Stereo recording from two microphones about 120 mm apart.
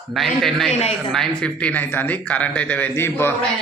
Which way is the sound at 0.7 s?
65° left (ahead or behind).